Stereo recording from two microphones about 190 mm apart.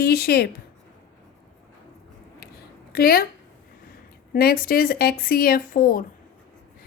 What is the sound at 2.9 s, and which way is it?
Speech, 50° left (ahead or behind).